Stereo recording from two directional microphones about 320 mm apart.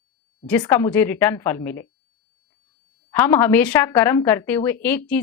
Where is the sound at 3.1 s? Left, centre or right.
Centre.